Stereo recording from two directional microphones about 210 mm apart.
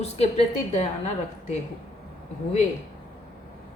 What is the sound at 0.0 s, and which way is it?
A woman's voice, 30° left (ahead or behind).